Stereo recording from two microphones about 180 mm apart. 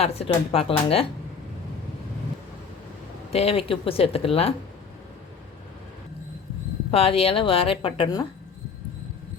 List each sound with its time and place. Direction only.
0.0 s a woman's voice: 35° left (ahead or behind)
3.3 s a woman's voice: 35° left (ahead or behind)
6.9 s a woman's voice: 30° left (ahead or behind)